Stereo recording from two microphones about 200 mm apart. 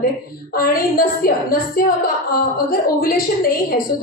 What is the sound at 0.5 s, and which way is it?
A woman's voice, 45° left (ahead or behind).